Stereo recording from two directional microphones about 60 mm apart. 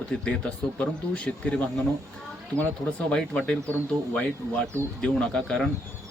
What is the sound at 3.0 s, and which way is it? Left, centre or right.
Speech, centre.